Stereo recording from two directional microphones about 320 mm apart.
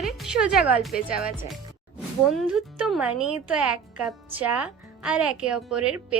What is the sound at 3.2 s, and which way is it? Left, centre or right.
Music, right.